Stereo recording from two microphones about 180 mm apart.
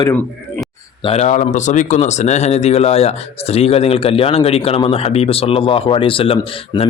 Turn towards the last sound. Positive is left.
turn(degrees=30)  # may be behind; listen again after turning